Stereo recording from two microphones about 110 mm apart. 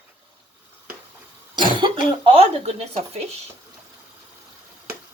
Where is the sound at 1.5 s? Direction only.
45° right (ahead or behind); by 3.2 s 70° right (ahead or behind).